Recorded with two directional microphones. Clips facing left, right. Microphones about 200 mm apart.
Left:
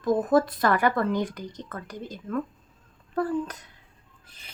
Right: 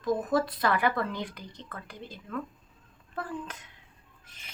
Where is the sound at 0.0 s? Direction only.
50° left (ahead or behind).